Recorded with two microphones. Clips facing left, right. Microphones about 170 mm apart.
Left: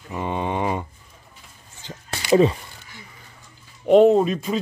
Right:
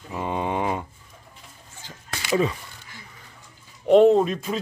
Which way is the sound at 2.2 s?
30° left (ahead or behind).